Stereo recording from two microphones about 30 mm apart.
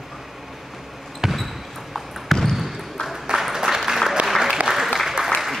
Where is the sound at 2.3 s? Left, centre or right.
Centre.